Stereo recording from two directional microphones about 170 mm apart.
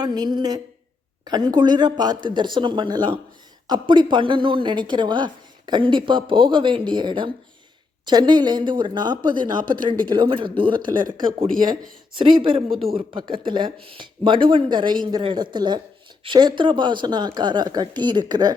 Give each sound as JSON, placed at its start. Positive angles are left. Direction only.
{"t": 0.0, "sound": "a woman's voice", "side_deg": -25}
{"t": 12.1, "sound": "a woman's voice", "side_deg": -30}